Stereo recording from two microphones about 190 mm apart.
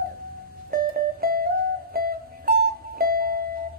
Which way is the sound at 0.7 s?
50° right (ahead or behind).